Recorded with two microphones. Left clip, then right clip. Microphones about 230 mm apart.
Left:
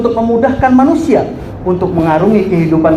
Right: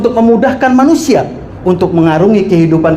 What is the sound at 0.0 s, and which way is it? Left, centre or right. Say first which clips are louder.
A woman's voice: right 2 dB; right.